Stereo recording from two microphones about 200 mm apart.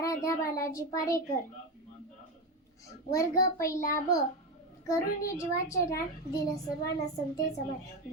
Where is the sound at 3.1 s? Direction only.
15° left (ahead or behind).